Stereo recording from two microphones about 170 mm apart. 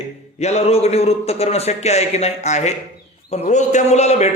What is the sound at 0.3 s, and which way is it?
Speech, 40° left (ahead or behind).